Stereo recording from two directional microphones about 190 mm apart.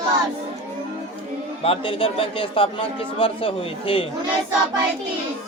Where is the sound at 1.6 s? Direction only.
30° left (ahead or behind).